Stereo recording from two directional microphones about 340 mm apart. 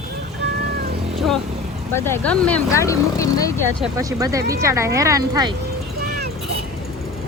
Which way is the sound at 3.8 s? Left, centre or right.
Centre.